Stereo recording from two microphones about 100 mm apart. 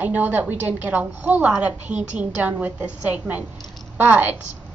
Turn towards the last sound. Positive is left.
turn(degrees=-15)  # may be behind; listen again after turning